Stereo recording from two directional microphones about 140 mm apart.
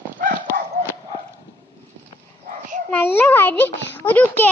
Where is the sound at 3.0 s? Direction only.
15° left (ahead or behind).